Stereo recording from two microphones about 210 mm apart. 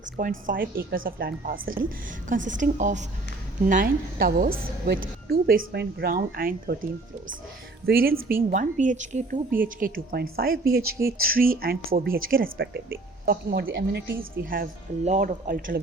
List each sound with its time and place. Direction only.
0.0 s speech: 40° right (ahead or behind)
7.9 s speech: 45° right (ahead or behind)